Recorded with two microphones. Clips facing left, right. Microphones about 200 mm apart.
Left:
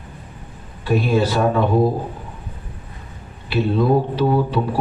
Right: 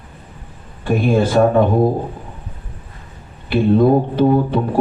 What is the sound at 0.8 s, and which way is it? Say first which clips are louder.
Speech: right 2 dB; 50° right (ahead or behind).